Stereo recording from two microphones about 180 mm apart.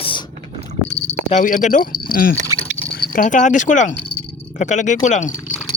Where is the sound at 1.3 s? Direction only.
45° left (ahead or behind).